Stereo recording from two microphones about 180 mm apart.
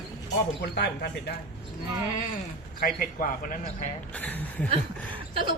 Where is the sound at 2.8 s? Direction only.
50° left (ahead or behind).